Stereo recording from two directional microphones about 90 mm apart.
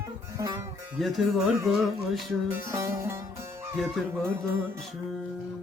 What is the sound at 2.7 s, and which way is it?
Music, 30° right (ahead or behind).